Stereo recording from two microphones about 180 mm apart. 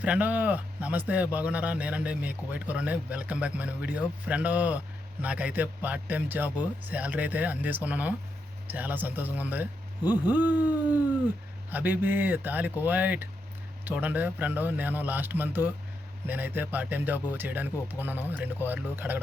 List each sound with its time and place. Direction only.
0.0 s speech: 10° right (ahead or behind)